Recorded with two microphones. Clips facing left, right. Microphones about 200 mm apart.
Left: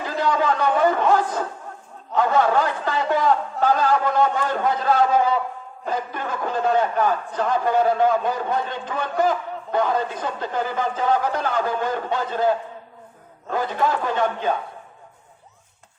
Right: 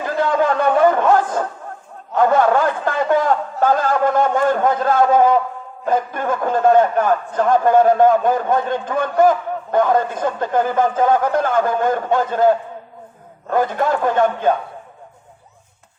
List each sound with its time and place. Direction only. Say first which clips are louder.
0.0 s a sound: right 4 dB; 50° right (ahead or behind)
5.8 s a man's voice: right 7 dB; 50° right (ahead or behind)
13.5 s a man's voice: right 5 dB; 50° right (ahead or behind)